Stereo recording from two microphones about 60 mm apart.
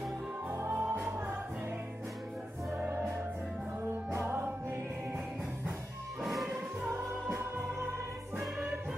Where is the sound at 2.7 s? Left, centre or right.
Right.